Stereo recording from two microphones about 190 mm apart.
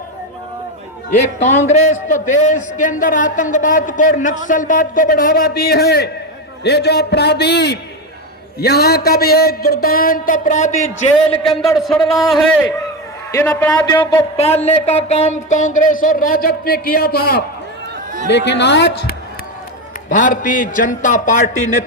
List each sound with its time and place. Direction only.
1.4 s a man's voice: 35° left (ahead or behind)
11.5 s speech: centre (ahead or behind)
13.3 s a man's voice: 10° left (ahead or behind)
13.7 s a sound: 20° left (ahead or behind)
14.3 s a man's voice: 35° left (ahead or behind); by 17.4 s 55° left (ahead or behind)
18.3 s a man's voice: 65° left (ahead or behind)
20.1 s a man's voice: 45° left (ahead or behind)